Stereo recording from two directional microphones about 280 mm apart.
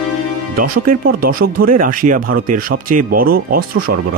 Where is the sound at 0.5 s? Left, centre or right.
Right.